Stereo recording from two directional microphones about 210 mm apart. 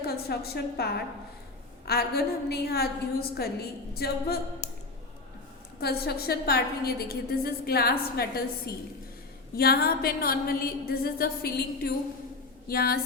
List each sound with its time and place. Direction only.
0.0 s a woman's voice: 50° left (ahead or behind)
5.8 s a woman's voice: 50° left (ahead or behind)